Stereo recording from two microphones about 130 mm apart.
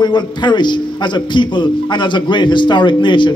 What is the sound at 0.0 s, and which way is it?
A man's voice, 35° left (ahead or behind).